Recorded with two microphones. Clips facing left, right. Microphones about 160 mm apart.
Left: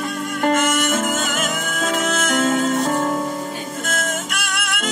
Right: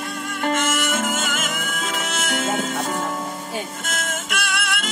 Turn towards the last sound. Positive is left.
turn(degrees=45)  # may be behind; listen again after turning